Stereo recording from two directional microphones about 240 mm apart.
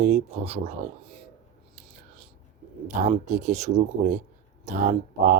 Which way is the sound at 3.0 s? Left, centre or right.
Right.